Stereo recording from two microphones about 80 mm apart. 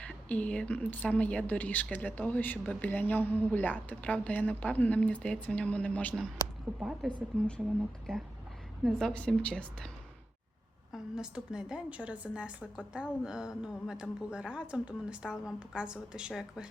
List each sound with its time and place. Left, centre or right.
0.0 s a woman's voice: centre
7.0 s a woman's voice: centre
10.9 s a woman's voice: centre